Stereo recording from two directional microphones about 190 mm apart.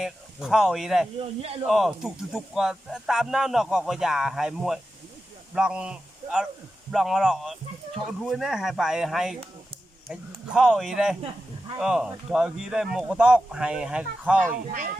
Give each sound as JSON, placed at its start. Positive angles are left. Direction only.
{"t": 0.0, "sound": "speech", "side_deg": 0}
{"t": 1.4, "sound": "speech", "side_deg": -30}
{"t": 1.6, "sound": "speech", "side_deg": 0}
{"t": 14.5, "sound": "speech", "side_deg": -45}